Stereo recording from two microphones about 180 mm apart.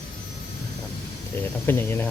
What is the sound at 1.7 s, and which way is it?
Speech, 10° left (ahead or behind).